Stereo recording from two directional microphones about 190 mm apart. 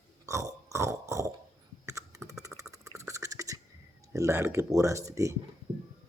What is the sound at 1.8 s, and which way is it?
Computer keyboard, 15° right (ahead or behind).